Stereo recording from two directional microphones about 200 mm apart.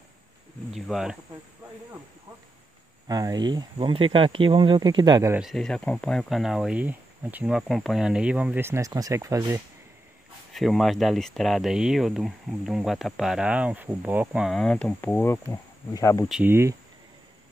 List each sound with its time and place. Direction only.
0.7 s speech: centre (ahead or behind)
3.1 s speech: 20° right (ahead or behind)
5.4 s speech: centre (ahead or behind); by 9.6 s 15° right (ahead or behind)
10.5 s speech: centre (ahead or behind); by 16.3 s 15° left (ahead or behind)
16.3 s speech: 5° right (ahead or behind)